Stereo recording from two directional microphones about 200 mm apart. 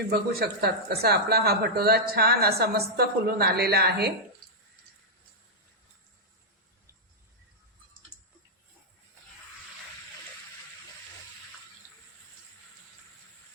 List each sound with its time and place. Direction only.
0.1 s speech: 50° right (ahead or behind)